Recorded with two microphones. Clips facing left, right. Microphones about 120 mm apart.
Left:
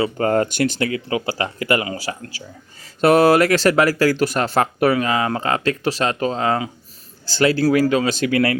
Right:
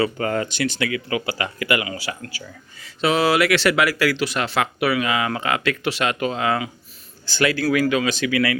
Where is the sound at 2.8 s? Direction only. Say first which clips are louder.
Left 6 dB; 50° left (ahead or behind).